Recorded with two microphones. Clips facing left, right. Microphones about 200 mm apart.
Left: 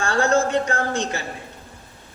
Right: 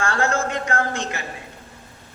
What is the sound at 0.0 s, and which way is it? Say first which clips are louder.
A man's voice: left 3 dB; 30° left (ahead or behind).